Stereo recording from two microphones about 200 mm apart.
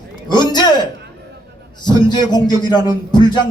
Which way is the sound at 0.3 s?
20° left (ahead or behind).